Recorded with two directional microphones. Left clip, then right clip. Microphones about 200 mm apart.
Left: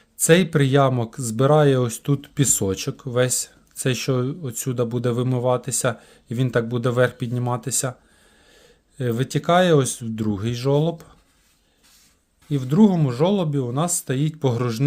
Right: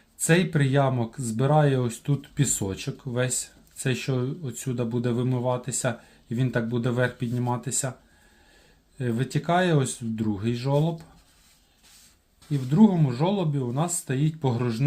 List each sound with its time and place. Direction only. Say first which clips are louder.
0.2 s speech: left 7 dB; 50° left (ahead or behind)
9.0 s speech: left 5 dB; 50° left (ahead or behind)
12.5 s speech: left 3 dB; 50° left (ahead or behind)